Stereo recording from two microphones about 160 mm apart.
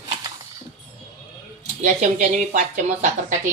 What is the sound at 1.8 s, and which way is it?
Speech, 50° right (ahead or behind).